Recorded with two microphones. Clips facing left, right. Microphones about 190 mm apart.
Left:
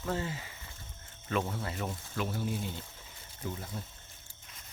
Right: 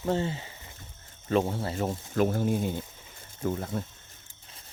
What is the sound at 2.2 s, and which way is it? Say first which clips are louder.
Speech: right 9 dB; 50° right (ahead or behind).